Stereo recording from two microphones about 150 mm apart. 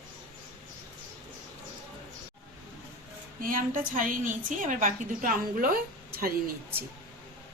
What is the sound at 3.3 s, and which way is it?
A woman's voice, 70° right (ahead or behind).